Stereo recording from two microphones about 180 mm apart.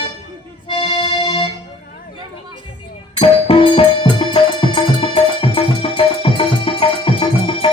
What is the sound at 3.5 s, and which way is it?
Music, 30° left (ahead or behind).